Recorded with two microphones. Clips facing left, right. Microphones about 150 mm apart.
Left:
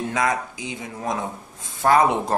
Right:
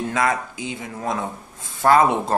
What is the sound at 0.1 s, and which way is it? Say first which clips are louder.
Speech: right 1 dB; 20° left (ahead or behind).